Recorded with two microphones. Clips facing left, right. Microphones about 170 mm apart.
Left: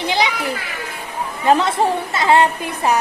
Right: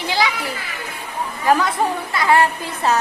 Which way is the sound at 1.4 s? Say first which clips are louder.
Left 2 dB; 25° left (ahead or behind).